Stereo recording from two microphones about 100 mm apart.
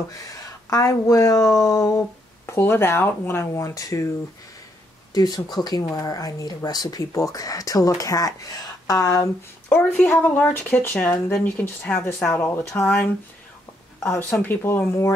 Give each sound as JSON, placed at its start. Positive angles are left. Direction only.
{"t": 0.3, "sound": "speech", "side_deg": 35}
{"t": 5.1, "sound": "speech", "side_deg": 45}
{"t": 9.7, "sound": "speech", "side_deg": 10}
{"t": 14.1, "sound": "speech", "side_deg": 20}